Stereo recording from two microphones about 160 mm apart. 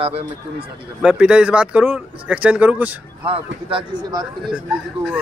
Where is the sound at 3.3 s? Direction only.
30° right (ahead or behind).